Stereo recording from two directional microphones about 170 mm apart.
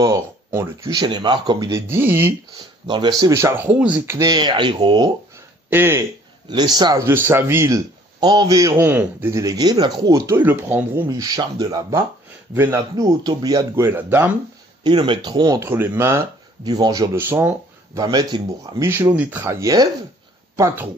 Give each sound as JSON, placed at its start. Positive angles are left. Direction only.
{"t": 0.0, "sound": "a man's voice", "side_deg": -15}
{"t": 2.9, "sound": "a man's voice", "side_deg": -25}
{"t": 5.7, "sound": "speech", "side_deg": -15}
{"t": 6.5, "sound": "a man's voice", "side_deg": -25}
{"t": 14.8, "sound": "a man's voice", "side_deg": -25}
{"t": 17.1, "sound": "speech", "side_deg": -15}